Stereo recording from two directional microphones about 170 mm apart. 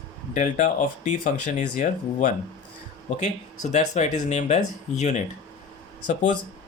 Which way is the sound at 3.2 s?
45° left (ahead or behind).